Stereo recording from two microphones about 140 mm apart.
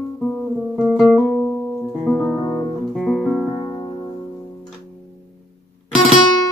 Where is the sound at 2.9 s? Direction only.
Centre (ahead or behind).